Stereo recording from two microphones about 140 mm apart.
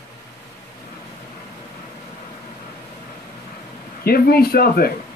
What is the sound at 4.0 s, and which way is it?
Speech, 90° left.